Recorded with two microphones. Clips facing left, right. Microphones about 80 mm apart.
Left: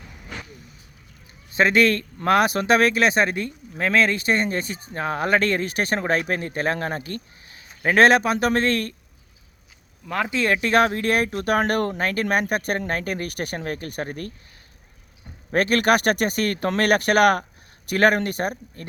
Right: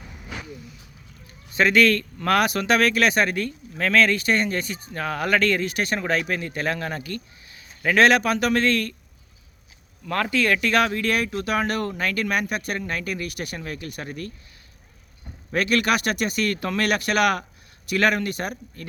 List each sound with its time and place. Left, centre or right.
0.0 s vehicle: centre
1.5 s speech: left
10.1 s speech: centre; by 14.3 s left
15.5 s speech: left